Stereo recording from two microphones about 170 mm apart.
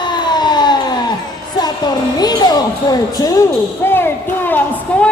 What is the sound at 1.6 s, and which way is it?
Speech, 25° left (ahead or behind).